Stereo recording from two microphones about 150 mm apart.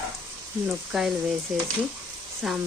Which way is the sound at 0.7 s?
5° right (ahead or behind).